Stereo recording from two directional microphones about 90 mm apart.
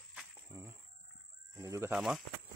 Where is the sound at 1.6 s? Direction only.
35° right (ahead or behind).